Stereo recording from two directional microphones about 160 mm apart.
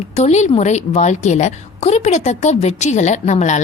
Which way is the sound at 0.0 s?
45° left (ahead or behind).